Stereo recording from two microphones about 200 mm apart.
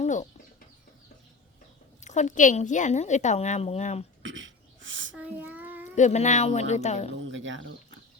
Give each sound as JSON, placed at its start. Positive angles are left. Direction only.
{"t": 0.0, "sound": "bird", "side_deg": 35}
{"t": 2.0, "sound": "a woman's voice", "side_deg": 35}
{"t": 4.2, "sound": "throat clearing", "side_deg": -70}
{"t": 5.1, "sound": "child singing", "side_deg": -5}
{"t": 6.0, "sound": "a woman's voice", "side_deg": 35}
{"t": 7.3, "sound": "speech", "side_deg": -70}